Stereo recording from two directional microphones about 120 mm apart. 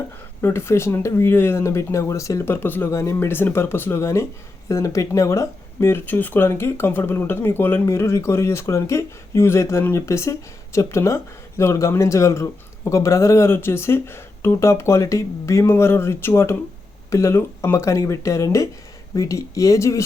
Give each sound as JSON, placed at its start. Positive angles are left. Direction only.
{"t": 0.4, "sound": "speech", "side_deg": 20}